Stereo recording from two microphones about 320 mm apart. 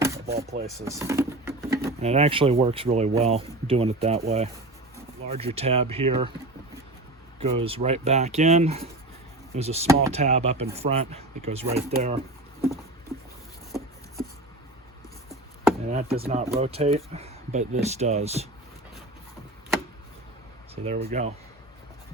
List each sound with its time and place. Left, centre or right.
0.0 s a sound: centre
0.3 s speech: right
0.9 s patter: centre
2.0 s speech: centre
7.6 s speech: centre
15.9 s speech: centre
20.8 s speech: centre